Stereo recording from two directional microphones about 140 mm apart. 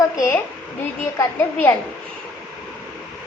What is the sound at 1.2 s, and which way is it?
Speech, 15° left (ahead or behind).